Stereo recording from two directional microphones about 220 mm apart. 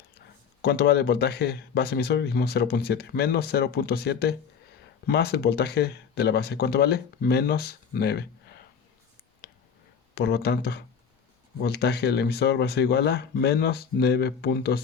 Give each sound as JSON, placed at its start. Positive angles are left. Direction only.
{"t": 0.6, "sound": "speech", "side_deg": 45}
{"t": 10.2, "sound": "speech", "side_deg": 50}